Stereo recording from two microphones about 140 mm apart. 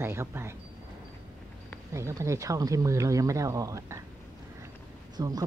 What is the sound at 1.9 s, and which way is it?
Speech, 20° right (ahead or behind).